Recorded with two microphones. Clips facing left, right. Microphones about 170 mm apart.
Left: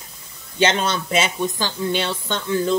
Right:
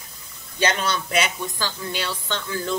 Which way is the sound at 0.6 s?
25° left (ahead or behind).